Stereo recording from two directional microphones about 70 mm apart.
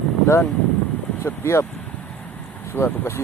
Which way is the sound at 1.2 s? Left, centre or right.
Left.